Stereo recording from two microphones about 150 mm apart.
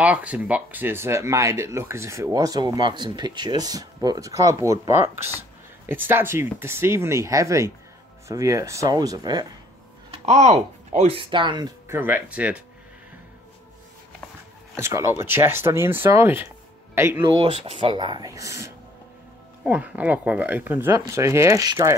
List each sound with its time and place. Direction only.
0.0 s speech: 10° right (ahead or behind); by 9.5 s 25° right (ahead or behind)
10.2 s speech: 45° right (ahead or behind)
11.1 s speech: 35° right (ahead or behind)
11.9 s speech: 15° right (ahead or behind)
14.8 s speech: 20° right (ahead or behind)
17.3 s speech: 35° right (ahead or behind)
19.6 s speech: 10° right (ahead or behind)